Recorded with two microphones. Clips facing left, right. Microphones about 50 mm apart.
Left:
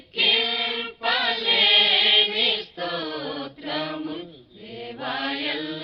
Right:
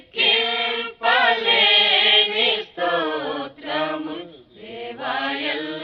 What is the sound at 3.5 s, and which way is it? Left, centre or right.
Chant, centre.